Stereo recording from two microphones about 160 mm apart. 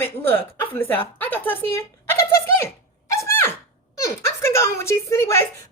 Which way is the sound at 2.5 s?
20° left (ahead or behind).